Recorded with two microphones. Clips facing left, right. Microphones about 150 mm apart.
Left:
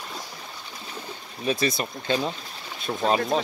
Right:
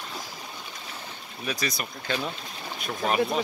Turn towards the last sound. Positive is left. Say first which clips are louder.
# left 4 dB
turn(degrees=25)  # may be behind; listen again after turning